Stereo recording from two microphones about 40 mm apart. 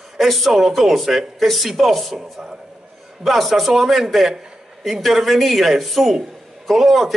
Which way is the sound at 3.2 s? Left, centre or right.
Centre.